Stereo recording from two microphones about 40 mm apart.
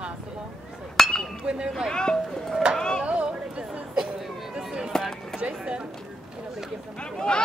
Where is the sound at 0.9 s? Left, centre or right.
Centre.